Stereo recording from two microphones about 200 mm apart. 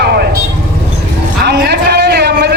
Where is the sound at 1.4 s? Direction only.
55° right (ahead or behind).